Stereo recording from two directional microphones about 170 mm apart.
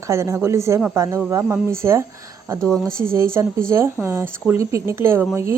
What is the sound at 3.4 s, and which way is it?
Speech, 15° right (ahead or behind).